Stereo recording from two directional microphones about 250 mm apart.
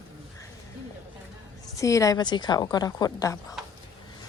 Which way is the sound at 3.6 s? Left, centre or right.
Centre.